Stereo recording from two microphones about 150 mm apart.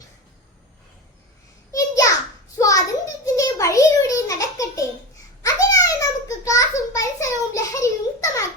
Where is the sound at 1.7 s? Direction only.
20° left (ahead or behind).